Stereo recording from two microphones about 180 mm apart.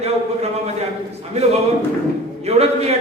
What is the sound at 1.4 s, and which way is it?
Speech, 35° right (ahead or behind).